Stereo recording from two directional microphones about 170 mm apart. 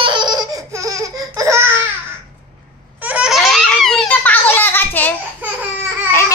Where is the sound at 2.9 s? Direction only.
10° right (ahead or behind); by 5.2 s 10° left (ahead or behind).